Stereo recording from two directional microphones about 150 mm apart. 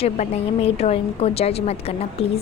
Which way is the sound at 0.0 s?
40° left (ahead or behind).